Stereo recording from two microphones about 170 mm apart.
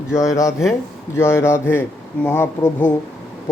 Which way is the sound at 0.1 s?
20° left (ahead or behind).